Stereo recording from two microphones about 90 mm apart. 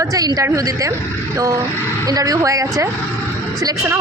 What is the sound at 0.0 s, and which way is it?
A woman's voice, 40° right (ahead or behind).